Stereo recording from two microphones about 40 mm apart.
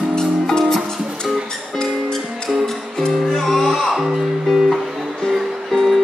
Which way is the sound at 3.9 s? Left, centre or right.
Centre.